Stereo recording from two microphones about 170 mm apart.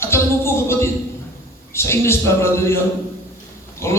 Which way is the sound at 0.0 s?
15° left (ahead or behind).